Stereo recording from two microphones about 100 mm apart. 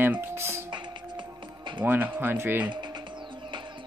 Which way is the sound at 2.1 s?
20° right (ahead or behind).